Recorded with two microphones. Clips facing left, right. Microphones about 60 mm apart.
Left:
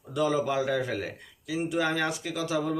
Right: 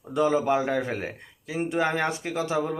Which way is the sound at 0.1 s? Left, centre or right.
Right.